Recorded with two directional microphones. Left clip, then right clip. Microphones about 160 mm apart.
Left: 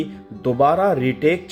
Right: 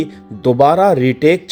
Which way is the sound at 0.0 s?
45° right (ahead or behind).